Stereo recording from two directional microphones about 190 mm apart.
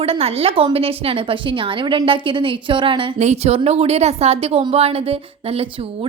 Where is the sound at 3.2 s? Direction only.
35° right (ahead or behind).